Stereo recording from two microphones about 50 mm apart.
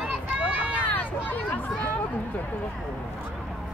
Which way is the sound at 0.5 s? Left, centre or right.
Right.